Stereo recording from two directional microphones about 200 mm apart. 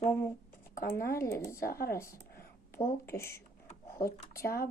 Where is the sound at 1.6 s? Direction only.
50° left (ahead or behind).